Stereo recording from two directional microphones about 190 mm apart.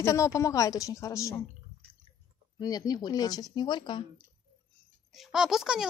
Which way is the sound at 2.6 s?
20° left (ahead or behind).